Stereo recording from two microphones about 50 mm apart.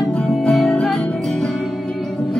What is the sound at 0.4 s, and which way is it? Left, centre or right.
Music, centre.